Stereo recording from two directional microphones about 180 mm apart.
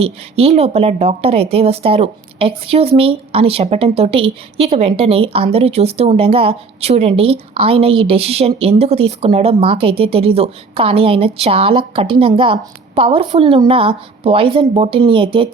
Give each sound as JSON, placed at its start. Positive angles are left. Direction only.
{"t": 0.0, "sound": "a woman's voice", "side_deg": -35}